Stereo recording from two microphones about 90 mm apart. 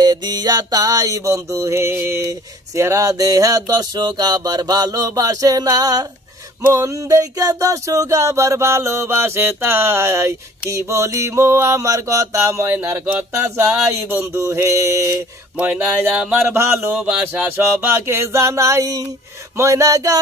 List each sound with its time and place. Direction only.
0.0 s music: 50° right (ahead or behind); by 15.1 s 30° right (ahead or behind)
15.5 s a sound: 15° right (ahead or behind); by 19.0 s 40° right (ahead or behind)
19.5 s music: 35° right (ahead or behind)